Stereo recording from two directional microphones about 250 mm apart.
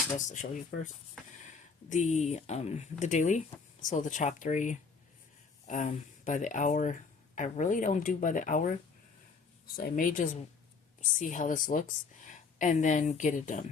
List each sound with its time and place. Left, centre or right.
0.3 s speech: left
9.7 s speech: left